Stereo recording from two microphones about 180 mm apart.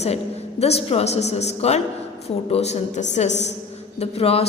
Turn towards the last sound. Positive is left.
turn(degrees=35)  # may be behind; listen again after turning